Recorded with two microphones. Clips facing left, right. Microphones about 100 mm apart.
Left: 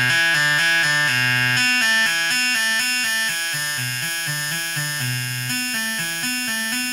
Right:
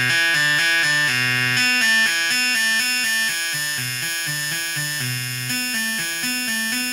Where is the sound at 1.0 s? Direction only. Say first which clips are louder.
Left 2 dB; 50° left (ahead or behind).